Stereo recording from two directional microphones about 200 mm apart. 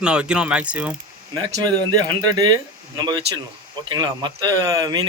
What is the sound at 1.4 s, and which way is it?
Speech, 20° right (ahead or behind).